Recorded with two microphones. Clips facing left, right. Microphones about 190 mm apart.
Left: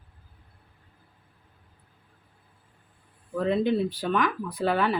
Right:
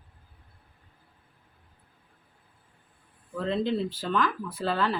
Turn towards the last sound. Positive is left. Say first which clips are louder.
# left 3 dB
turn(degrees=15)  # may be behind; listen again after turning